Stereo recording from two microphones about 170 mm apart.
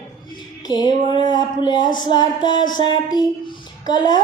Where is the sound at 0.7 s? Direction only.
25° left (ahead or behind).